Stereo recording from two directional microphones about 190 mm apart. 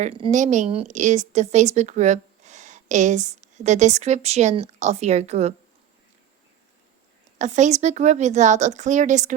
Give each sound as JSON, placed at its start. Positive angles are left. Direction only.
{"t": 0.0, "sound": "a woman's voice", "side_deg": -30}
{"t": 7.3, "sound": "a woman's voice", "side_deg": -40}